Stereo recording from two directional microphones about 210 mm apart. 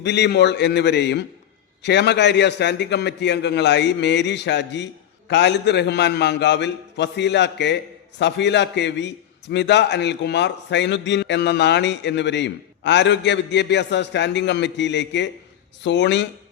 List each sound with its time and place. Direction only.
0.0 s a man's voice: 55° left (ahead or behind)